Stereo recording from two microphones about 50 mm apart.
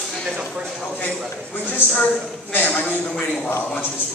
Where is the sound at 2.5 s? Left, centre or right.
Left.